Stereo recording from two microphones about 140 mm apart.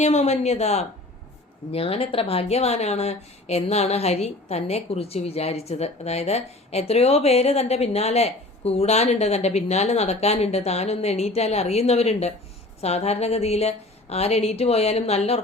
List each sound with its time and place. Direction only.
0.0 s speech: 50° left (ahead or behind)